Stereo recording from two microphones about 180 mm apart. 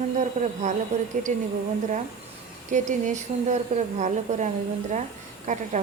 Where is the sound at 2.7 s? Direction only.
45° right (ahead or behind).